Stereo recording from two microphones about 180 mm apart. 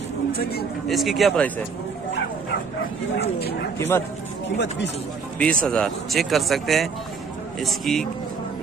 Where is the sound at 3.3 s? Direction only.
60° left (ahead or behind).